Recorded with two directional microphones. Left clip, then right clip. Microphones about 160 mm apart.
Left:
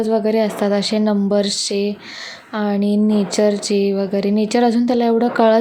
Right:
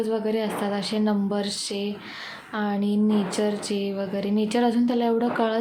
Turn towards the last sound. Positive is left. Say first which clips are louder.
# left 9 dB
turn(degrees=40)  # may be behind; listen again after turning